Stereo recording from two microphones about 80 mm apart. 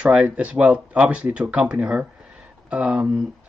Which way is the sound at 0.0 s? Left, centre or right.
Centre.